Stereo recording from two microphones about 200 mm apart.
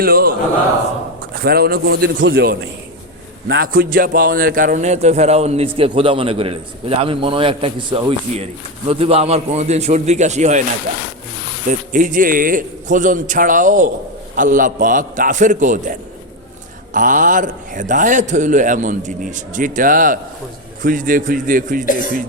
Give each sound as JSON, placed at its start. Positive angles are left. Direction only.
{"t": 0.0, "sound": "a man's voice", "side_deg": -50}
{"t": 1.4, "sound": "a man's voice", "side_deg": -50}
{"t": 11.7, "sound": "a man's voice", "side_deg": -40}